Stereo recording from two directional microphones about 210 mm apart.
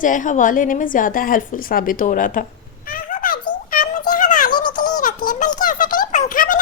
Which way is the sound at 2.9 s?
40° left (ahead or behind).